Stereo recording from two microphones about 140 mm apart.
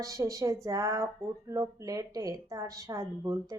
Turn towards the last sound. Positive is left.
turn(degrees=-25)  # may be behind; listen again after turning